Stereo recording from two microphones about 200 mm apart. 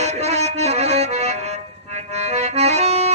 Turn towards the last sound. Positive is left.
turn(degrees=-35)  # may be behind; listen again after turning